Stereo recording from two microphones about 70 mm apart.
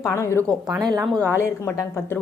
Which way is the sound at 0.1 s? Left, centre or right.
Left.